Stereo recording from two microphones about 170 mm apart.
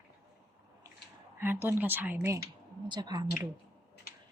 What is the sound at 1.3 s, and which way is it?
Speech, 15° right (ahead or behind).